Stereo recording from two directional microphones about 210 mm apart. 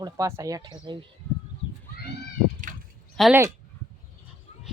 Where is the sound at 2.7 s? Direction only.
40° right (ahead or behind).